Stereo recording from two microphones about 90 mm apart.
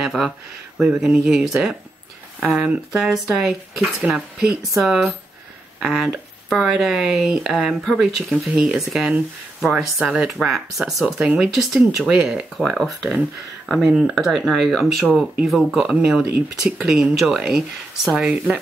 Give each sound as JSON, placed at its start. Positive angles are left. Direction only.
{"t": 0.0, "sound": "speech", "side_deg": -5}
{"t": 2.9, "sound": "speech", "side_deg": -5}
{"t": 12.5, "sound": "speech", "side_deg": 0}
{"t": 15.0, "sound": "speech", "side_deg": -15}
{"t": 15.4, "sound": "speech", "side_deg": -5}